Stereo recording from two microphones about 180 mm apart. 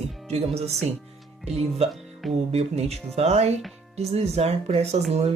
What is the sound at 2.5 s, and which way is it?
Speech, 35° right (ahead or behind).